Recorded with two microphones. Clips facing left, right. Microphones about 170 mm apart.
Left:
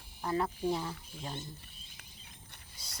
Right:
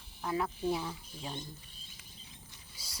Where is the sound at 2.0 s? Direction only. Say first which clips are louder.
Right 1 dB; 60° left (ahead or behind).